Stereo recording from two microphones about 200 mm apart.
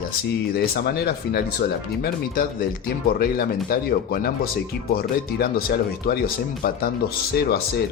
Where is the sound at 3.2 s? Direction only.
50° left (ahead or behind).